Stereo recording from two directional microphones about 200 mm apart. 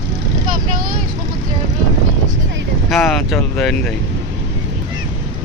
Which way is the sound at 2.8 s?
Centre (ahead or behind).